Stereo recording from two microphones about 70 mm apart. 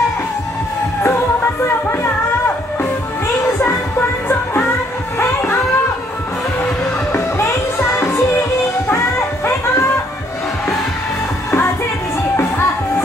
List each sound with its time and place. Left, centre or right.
1.0 s music: left
5.2 s a sound: left
7.1 s music: left
12.4 s music: left